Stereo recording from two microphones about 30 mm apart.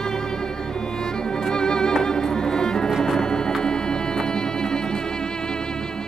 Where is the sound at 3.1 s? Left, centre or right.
Left.